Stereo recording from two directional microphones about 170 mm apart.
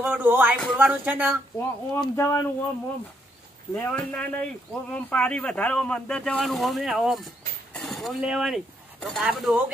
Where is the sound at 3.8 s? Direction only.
10° left (ahead or behind).